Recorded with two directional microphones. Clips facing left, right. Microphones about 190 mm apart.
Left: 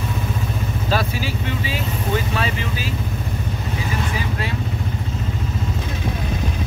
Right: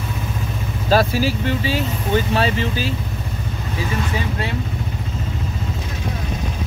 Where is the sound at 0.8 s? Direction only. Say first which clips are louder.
Right 7 dB; 35° right (ahead or behind).